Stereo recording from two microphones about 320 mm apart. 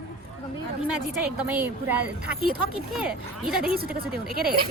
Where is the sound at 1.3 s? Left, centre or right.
Centre.